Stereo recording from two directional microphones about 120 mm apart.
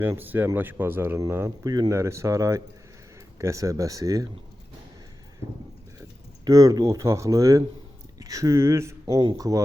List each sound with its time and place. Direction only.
0.0 s speech: 15° right (ahead or behind)
6.4 s speech: 30° right (ahead or behind)